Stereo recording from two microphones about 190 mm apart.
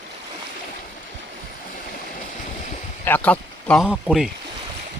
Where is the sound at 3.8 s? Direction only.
5° right (ahead or behind).